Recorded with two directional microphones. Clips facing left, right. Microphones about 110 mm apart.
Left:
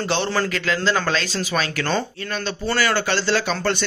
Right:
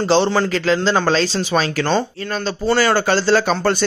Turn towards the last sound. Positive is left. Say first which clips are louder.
# right 5 dB
turn(degrees=-40)  # may be behind; listen again after turning